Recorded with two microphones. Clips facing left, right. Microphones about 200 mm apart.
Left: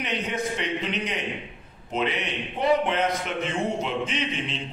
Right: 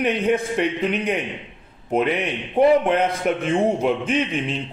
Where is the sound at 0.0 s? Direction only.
55° right (ahead or behind).